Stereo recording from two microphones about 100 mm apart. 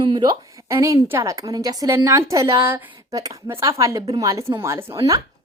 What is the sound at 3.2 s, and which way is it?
A woman's voice, 35° right (ahead or behind).